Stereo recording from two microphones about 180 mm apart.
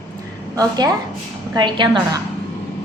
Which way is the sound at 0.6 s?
20° right (ahead or behind).